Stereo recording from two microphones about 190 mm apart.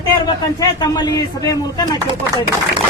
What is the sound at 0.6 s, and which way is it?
Speech, 20° left (ahead or behind).